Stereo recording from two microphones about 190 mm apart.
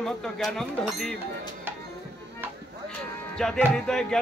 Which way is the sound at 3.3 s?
5° left (ahead or behind).